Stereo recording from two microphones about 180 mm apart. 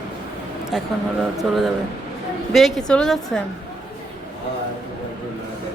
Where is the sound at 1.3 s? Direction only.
Centre (ahead or behind).